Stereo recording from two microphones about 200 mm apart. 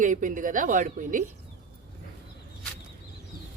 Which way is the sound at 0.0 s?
40° right (ahead or behind).